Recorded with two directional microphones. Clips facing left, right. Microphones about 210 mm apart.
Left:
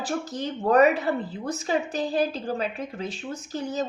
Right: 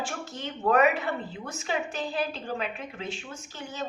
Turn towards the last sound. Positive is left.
turn(degrees=40)  # may be behind; listen again after turning